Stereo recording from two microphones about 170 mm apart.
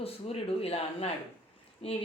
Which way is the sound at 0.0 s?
35° left (ahead or behind).